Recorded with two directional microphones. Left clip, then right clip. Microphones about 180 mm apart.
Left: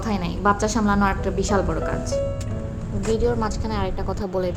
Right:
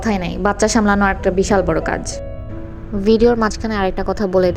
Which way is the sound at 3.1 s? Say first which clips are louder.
Right 9 dB; 35° right (ahead or behind).